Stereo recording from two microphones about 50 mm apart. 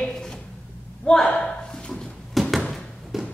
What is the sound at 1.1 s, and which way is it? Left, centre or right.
Speech, centre.